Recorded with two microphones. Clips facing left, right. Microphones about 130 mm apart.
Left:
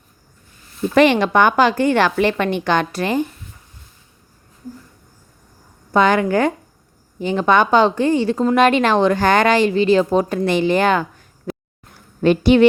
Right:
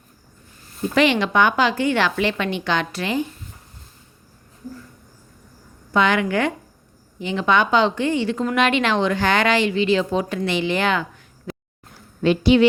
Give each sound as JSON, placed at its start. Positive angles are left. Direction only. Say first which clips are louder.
{"t": 0.9, "sound": "a woman's voice", "louder": "left 4 dB", "side_deg": 50}
{"t": 5.9, "sound": "a woman's voice", "louder": "left 4 dB", "side_deg": 40}